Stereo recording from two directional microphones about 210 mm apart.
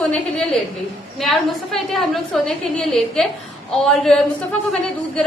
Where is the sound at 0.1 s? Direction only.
5° left (ahead or behind).